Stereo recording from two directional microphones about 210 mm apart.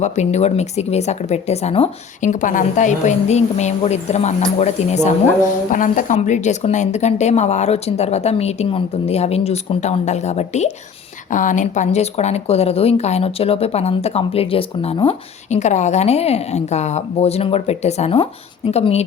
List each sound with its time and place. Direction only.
0.0 s speech: 30° left (ahead or behind)